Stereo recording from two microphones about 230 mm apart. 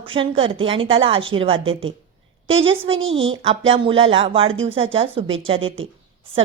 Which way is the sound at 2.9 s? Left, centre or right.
Right.